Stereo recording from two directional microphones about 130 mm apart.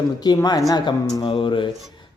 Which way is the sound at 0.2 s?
30° left (ahead or behind).